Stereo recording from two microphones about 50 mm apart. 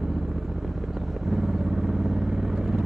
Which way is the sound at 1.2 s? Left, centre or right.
Centre.